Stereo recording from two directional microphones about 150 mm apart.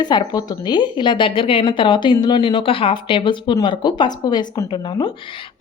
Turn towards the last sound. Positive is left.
turn(degrees=30)  # may be behind; listen again after turning